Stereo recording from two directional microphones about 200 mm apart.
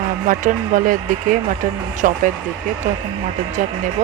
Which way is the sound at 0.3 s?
40° right (ahead or behind).